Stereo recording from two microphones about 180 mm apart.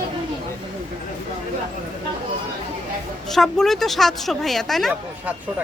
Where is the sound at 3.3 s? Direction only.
Centre (ahead or behind).